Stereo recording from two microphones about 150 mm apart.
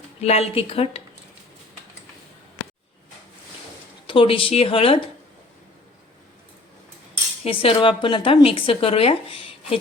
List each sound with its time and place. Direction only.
0.2 s speech: 45° left (ahead or behind)
4.0 s speech: 35° left (ahead or behind)
7.4 s speech: 35° left (ahead or behind)